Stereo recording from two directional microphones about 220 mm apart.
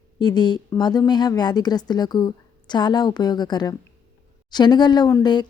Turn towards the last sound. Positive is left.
turn(degrees=20)  # may be behind; listen again after turning